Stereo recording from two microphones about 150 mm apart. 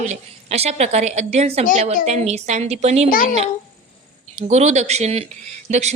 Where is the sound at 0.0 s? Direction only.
45° right (ahead or behind).